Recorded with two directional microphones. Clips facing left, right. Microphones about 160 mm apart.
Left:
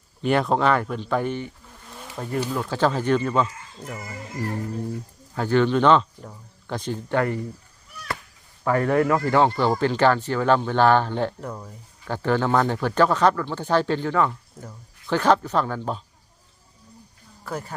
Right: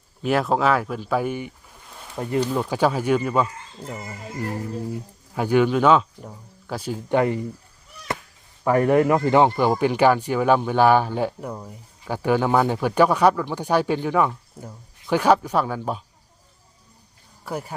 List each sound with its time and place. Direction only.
0.2 s speech: centre (ahead or behind)
1.9 s a sound: centre (ahead or behind)
2.6 s speech: 10° right (ahead or behind)
3.8 s speech: 25° right (ahead or behind)
5.3 s speech: 10° right (ahead or behind)
8.6 s speech: 20° right (ahead or behind)
17.4 s speech: 10° right (ahead or behind)